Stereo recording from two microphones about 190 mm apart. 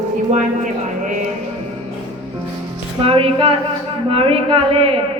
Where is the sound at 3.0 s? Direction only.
30° right (ahead or behind).